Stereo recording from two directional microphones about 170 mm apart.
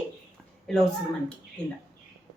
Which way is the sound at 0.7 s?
5° left (ahead or behind).